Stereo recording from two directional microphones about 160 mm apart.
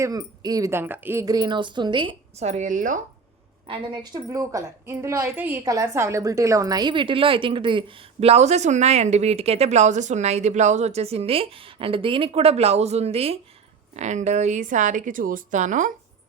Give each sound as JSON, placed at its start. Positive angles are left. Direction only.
{"t": 0.0, "sound": "a woman's voice", "side_deg": -20}
{"t": 2.4, "sound": "speech", "side_deg": -50}
{"t": 3.7, "sound": "a woman's voice", "side_deg": -25}